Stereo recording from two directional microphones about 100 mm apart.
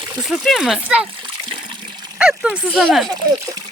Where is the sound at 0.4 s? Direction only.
Centre (ahead or behind).